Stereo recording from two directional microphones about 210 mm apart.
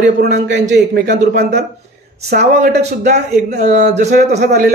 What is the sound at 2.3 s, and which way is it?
A man's voice, 50° right (ahead or behind).